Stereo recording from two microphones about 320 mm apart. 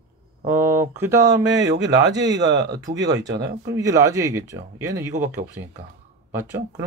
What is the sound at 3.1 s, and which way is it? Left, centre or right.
Speech, right.